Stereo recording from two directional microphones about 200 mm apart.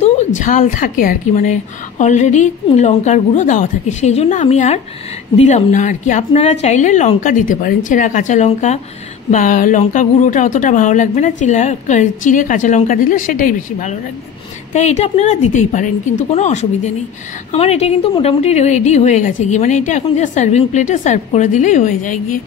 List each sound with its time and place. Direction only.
0.4 s speech: 40° left (ahead or behind)